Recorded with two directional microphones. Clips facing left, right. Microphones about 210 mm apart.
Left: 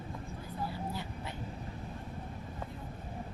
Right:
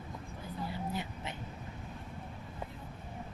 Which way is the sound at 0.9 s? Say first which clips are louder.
Right 1 dB; 20° right (ahead or behind).